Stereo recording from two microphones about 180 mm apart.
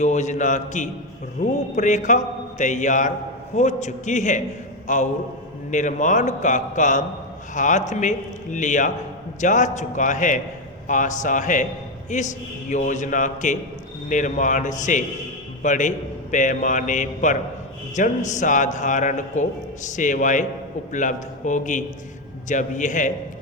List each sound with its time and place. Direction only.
0.0 s a man's voice: 40° left (ahead or behind)